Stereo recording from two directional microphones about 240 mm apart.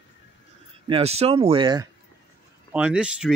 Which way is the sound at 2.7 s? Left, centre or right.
Centre.